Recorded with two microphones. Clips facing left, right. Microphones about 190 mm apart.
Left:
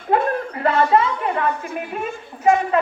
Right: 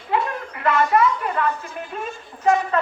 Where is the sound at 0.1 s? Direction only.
50° left (ahead or behind).